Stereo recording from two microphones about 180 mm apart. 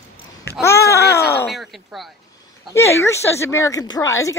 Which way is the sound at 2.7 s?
15° left (ahead or behind).